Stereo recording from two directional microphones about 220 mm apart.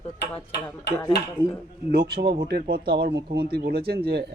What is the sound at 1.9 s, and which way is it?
Speech, 45° right (ahead or behind).